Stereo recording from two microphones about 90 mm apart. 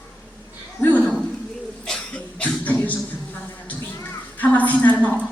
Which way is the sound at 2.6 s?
15° left (ahead or behind).